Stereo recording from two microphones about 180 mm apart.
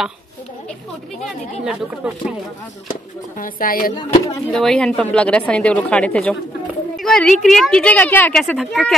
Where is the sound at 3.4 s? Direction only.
50° left (ahead or behind).